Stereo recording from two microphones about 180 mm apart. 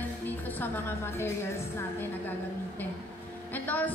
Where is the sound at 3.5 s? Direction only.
10° left (ahead or behind).